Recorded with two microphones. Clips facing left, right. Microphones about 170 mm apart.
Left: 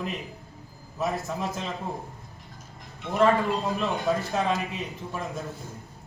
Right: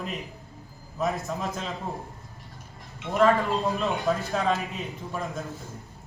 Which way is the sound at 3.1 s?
Centre (ahead or behind).